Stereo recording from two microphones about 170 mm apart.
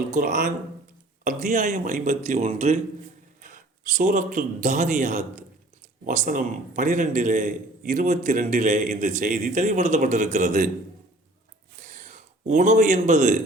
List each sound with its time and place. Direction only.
0.1 s a man's voice: 50° right (ahead or behind)
11.9 s a man's voice: 45° right (ahead or behind)